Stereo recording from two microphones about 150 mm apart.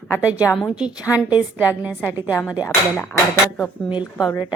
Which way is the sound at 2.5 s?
20° left (ahead or behind).